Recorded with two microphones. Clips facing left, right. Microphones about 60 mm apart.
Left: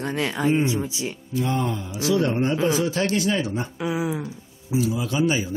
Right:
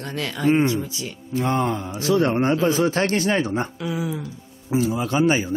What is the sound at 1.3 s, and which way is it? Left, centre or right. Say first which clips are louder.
A man's voice: right 4 dB; right.